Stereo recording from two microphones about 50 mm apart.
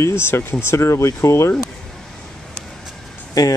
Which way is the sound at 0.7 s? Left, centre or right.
Left.